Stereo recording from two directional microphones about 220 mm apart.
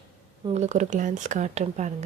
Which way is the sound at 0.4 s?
30° right (ahead or behind).